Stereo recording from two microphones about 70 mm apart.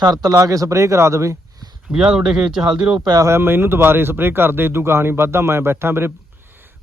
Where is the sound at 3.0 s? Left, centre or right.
Right.